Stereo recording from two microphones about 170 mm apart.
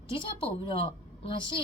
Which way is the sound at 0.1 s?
30° left (ahead or behind).